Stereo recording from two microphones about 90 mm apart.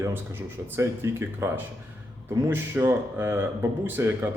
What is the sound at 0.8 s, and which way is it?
A man's voice, 30° right (ahead or behind).